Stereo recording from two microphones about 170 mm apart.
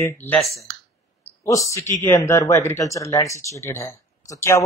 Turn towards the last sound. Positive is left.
turn(degrees=20)  # may be behind; listen again after turning